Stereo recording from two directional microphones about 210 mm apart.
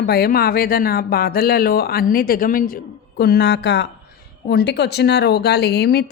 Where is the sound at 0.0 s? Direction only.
45° left (ahead or behind).